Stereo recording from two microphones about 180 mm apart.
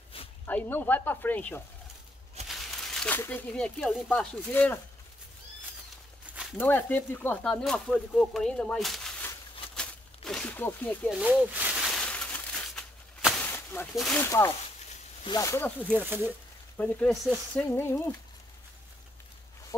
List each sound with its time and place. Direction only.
0.5 s frying: 10° left (ahead or behind)
2.4 s a sound: centre (ahead or behind)
3.2 s frying: 10° left (ahead or behind)
6.6 s speech: 10° left (ahead or behind)
9.8 s a sound: 5° left (ahead or behind)
11.1 s a sound: 5° right (ahead or behind); by 13.8 s 10° left (ahead or behind)
13.9 s speech: centre (ahead or behind)
14.2 s frying: 15° left (ahead or behind)
15.2 s speech: 20° left (ahead or behind)
16.0 s speech: 10° right (ahead or behind)
16.3 s frying: 5° left (ahead or behind)